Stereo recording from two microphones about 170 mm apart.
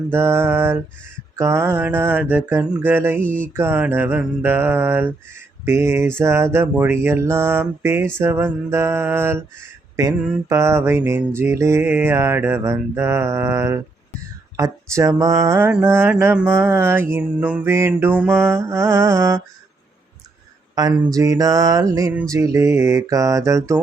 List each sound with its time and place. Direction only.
0.1 s mantra: 15° right (ahead or behind)
3.2 s a sound: 10° left (ahead or behind)
3.5 s mantra: 15° right (ahead or behind)
21.0 s music: 20° right (ahead or behind)
22.3 s mantra: 20° right (ahead or behind)